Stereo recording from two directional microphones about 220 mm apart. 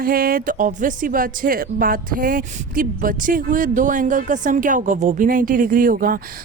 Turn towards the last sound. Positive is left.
turn(degrees=-40)  # may be behind; listen again after turning